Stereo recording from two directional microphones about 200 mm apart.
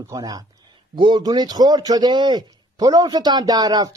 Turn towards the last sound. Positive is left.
turn(degrees=-20)  # may be behind; listen again after turning